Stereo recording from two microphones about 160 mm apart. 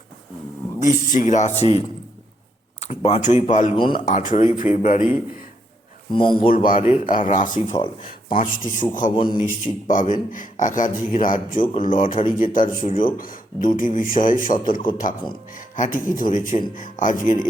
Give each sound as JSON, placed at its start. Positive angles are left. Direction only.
{"t": 0.8, "sound": "speech", "side_deg": 55}
{"t": 2.8, "sound": "speech", "side_deg": 40}
{"t": 3.8, "sound": "speech", "side_deg": 30}
{"t": 4.0, "sound": "a man's voice", "side_deg": 55}
{"t": 6.1, "sound": "speech", "side_deg": 30}
{"t": 6.7, "sound": "a man's voice", "side_deg": 55}
{"t": 9.1, "sound": "speech", "side_deg": 30}
{"t": 9.8, "sound": "a man's voice", "side_deg": 55}